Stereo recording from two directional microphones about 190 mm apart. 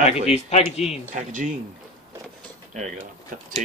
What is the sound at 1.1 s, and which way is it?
Speech, 40° right (ahead or behind).